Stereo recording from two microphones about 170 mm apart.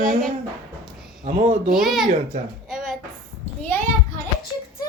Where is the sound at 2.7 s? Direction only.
5° right (ahead or behind).